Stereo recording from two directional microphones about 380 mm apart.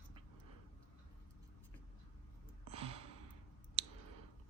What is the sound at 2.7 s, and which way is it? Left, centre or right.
Sigh, centre.